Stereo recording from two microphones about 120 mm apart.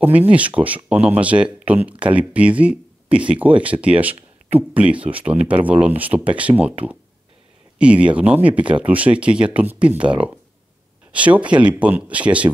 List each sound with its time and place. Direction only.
0.0 s speech: 15° right (ahead or behind)
7.8 s speech: 10° right (ahead or behind)